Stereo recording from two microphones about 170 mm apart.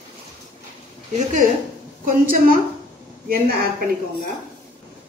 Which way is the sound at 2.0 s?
50° right (ahead or behind).